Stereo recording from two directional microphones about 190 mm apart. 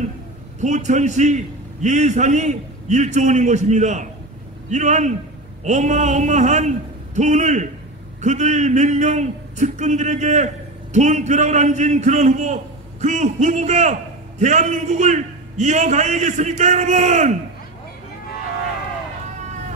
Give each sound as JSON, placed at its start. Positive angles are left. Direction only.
{"t": 0.6, "sound": "speech", "side_deg": -40}